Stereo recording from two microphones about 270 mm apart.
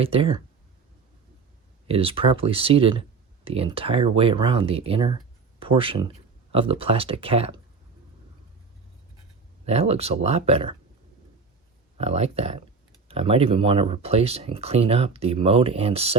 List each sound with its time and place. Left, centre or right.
0.0 s speech: right
1.9 s speech: right
9.6 s speech: right
11.9 s speech: right